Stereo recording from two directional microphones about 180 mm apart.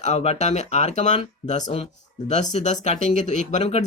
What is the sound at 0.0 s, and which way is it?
Speech, 35° left (ahead or behind).